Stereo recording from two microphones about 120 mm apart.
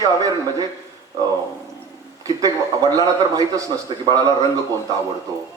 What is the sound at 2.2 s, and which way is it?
A man's voice, 30° right (ahead or behind).